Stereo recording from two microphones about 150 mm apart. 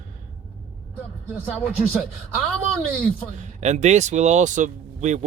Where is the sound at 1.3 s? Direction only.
10° right (ahead or behind).